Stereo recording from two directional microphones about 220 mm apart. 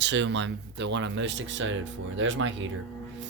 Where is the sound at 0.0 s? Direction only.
55° right (ahead or behind).